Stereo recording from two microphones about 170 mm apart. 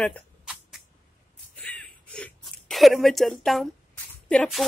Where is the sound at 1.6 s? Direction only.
10° left (ahead or behind).